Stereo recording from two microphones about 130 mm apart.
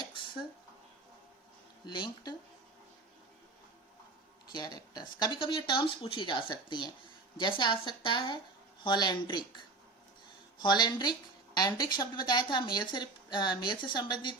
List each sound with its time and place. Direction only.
1.9 s a woman's voice: 35° left (ahead or behind)
4.5 s a woman's voice: 30° left (ahead or behind)